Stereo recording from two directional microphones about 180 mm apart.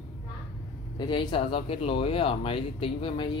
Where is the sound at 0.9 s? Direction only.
25° left (ahead or behind).